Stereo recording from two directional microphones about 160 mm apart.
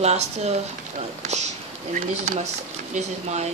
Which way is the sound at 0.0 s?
45° right (ahead or behind).